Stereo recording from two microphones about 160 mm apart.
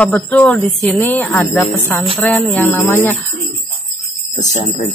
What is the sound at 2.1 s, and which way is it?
Music, 5° left (ahead or behind).